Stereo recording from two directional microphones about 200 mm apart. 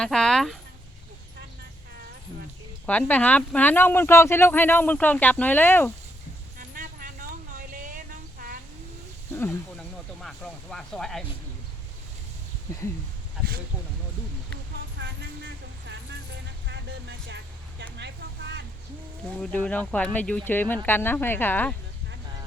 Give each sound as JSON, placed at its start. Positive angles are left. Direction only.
{"t": 0.0, "sound": "speech", "side_deg": 5}
{"t": 2.8, "sound": "speech", "side_deg": 5}
{"t": 6.6, "sound": "a sound", "side_deg": -45}
{"t": 9.3, "sound": "snake", "side_deg": 10}
{"t": 10.2, "sound": "speech", "side_deg": 0}
{"t": 16.6, "sound": "vehicle", "side_deg": -60}
{"t": 19.4, "sound": "speech", "side_deg": 5}